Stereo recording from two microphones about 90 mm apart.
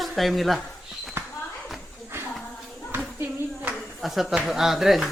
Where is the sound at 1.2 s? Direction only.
30° right (ahead or behind).